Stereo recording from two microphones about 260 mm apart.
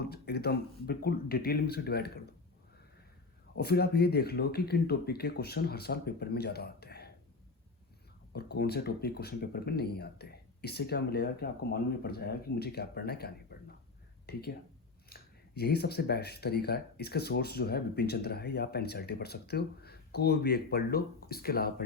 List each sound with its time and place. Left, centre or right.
0.0 s speech: left
3.5 s speech: left
8.3 s speech: left